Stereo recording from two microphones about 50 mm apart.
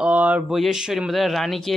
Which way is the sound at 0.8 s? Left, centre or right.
Centre.